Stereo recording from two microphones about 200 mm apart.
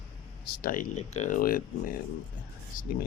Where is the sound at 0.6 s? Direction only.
45° left (ahead or behind).